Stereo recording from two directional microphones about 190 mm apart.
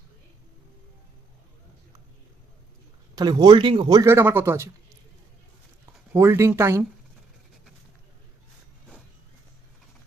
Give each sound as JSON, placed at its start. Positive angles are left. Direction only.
{"t": 3.2, "sound": "speech", "side_deg": -20}
{"t": 6.1, "sound": "speech", "side_deg": -15}